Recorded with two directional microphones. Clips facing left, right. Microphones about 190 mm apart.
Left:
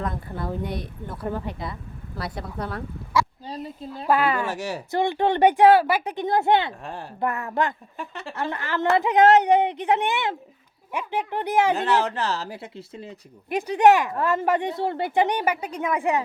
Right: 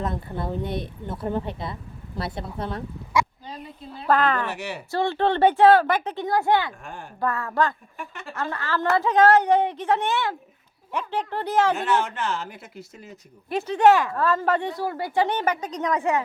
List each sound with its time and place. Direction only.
0.0 s speech: 25° right (ahead or behind)
3.5 s a sound: 35° left (ahead or behind)
4.0 s speech: 10° left (ahead or behind)
4.4 s speech: 40° left (ahead or behind)
4.9 s a woman's voice: 15° left (ahead or behind)
6.8 s speech: 35° left (ahead or behind)
7.2 s a woman's voice: 20° left (ahead or behind)
7.9 s speech: 30° left (ahead or behind)
8.4 s a woman's voice: 20° left (ahead or behind)
11.9 s speech: 35° left (ahead or behind)
13.5 s speech: 15° left (ahead or behind)